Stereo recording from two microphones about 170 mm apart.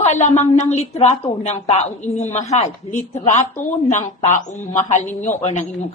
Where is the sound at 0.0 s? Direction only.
40° left (ahead or behind).